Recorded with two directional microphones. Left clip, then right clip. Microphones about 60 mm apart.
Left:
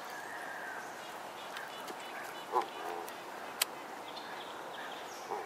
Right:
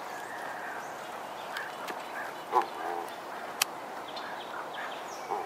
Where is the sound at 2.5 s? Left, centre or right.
Right.